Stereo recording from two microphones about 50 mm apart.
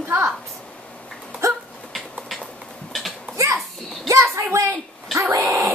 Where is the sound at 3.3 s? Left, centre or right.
Right.